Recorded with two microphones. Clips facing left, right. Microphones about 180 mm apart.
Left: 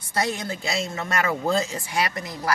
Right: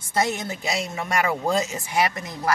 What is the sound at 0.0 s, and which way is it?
Speech, 25° right (ahead or behind).